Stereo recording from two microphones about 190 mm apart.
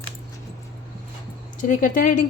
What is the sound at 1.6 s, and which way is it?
Speech, 45° left (ahead or behind).